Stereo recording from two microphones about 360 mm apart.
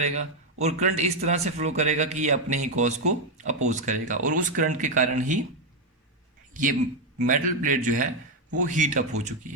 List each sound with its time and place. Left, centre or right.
0.0 s speech: centre
6.5 s a man's voice: right